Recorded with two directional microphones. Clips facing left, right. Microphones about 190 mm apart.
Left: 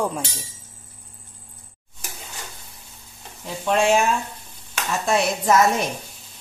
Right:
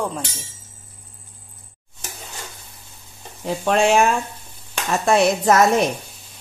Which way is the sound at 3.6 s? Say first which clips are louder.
Right 1 dB; 70° right (ahead or behind).